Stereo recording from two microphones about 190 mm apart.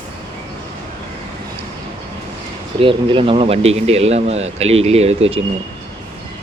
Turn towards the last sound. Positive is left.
turn(degrees=-30)  # may be behind; listen again after turning